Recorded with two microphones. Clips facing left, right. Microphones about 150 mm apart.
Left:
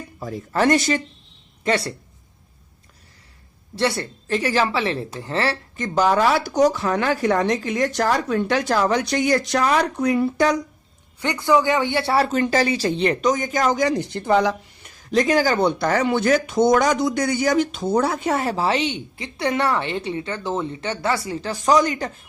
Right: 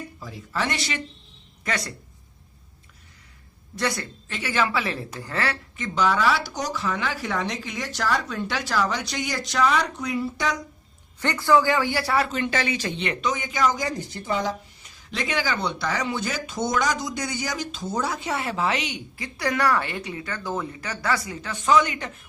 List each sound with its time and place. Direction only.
0.2 s a woman's voice: 50° left (ahead or behind)
1.6 s speech: 30° left (ahead or behind)
3.8 s a woman's voice: 30° left (ahead or behind); by 10.5 s 55° left (ahead or behind)
11.2 s speech: 15° left (ahead or behind); by 13.7 s 45° left (ahead or behind)
13.7 s a woman's voice: 75° left (ahead or behind)
15.1 s speech: 40° left (ahead or behind)